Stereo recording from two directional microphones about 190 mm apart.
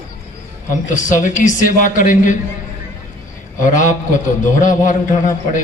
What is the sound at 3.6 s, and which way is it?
A man's voice, 40° left (ahead or behind).